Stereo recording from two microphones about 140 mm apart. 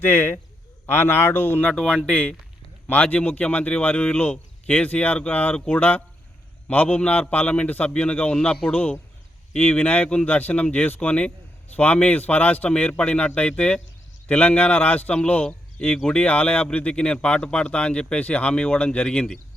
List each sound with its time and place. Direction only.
0.0 s speech: 15° left (ahead or behind)